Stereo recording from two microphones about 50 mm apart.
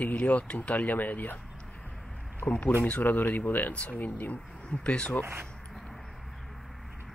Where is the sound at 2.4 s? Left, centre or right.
Left.